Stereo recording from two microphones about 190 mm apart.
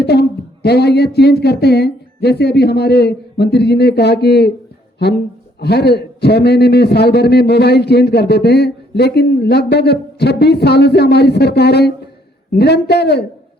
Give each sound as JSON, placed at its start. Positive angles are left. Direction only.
{"t": 0.0, "sound": "a man's voice", "side_deg": 60}
{"t": 5.5, "sound": "a man's voice", "side_deg": 60}